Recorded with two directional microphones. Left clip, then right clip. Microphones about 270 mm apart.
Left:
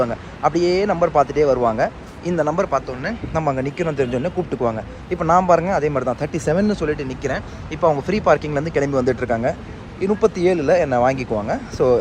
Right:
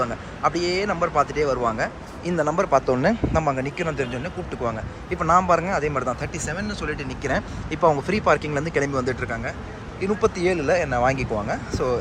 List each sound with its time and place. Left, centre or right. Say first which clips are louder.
0.0 s speech: left 4 dB; centre
2.7 s speech: right 3 dB; centre
3.3 s speech: left 2 dB; centre